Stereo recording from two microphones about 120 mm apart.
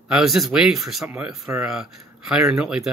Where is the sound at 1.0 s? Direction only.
15° right (ahead or behind).